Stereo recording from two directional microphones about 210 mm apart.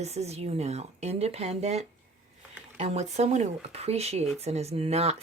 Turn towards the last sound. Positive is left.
turn(degrees=-30)  # may be behind; listen again after turning